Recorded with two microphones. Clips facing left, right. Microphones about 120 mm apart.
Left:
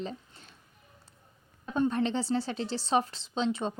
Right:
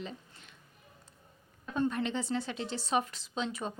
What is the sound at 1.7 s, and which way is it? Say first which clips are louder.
A woman's voice: left 4 dB; 30° left (ahead or behind).